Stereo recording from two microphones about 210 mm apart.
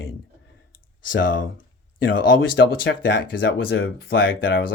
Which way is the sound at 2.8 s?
50° left (ahead or behind).